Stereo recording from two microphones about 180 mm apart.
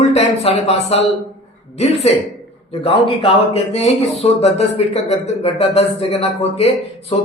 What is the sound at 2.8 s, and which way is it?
A man's voice, 35° left (ahead or behind).